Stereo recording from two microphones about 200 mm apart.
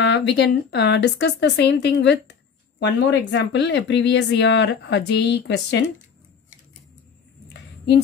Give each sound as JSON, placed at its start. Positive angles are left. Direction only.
{"t": 0.0, "sound": "speech", "side_deg": 60}